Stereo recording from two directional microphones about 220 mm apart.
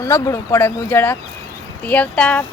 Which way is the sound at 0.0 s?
15° left (ahead or behind).